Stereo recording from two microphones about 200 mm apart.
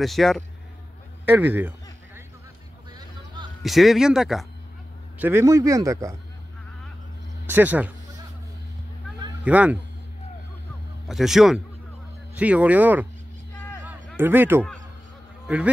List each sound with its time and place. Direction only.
0.0 s speech: centre (ahead or behind)
1.2 s speech: 10° right (ahead or behind)
3.6 s speech: centre (ahead or behind)
5.2 s speech: 15° right (ahead or behind)
7.4 s speech: 10° right (ahead or behind)
9.4 s speech: 5° right (ahead or behind)
11.1 s speech: centre (ahead or behind)
13.6 s a sound: 10° left (ahead or behind)
13.8 s a sound: 10° right (ahead or behind)
15.4 s speech: 5° right (ahead or behind)